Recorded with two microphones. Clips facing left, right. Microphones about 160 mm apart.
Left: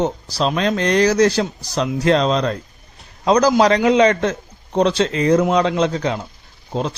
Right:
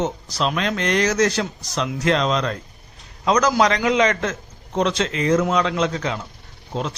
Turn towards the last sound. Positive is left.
turn(degrees=35)  # may be behind; listen again after turning